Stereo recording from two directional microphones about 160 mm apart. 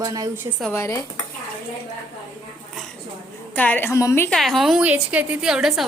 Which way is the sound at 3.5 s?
10° left (ahead or behind).